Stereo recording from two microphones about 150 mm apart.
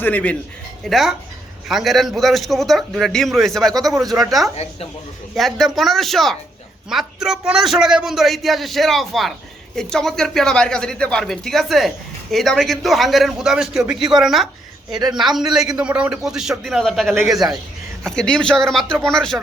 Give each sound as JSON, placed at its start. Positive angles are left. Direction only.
{"t": 0.0, "sound": "a man's voice", "side_deg": 10}
{"t": 0.9, "sound": "a man's voice", "side_deg": 0}
{"t": 4.5, "sound": "speech", "side_deg": 45}
{"t": 5.3, "sound": "a man's voice", "side_deg": 0}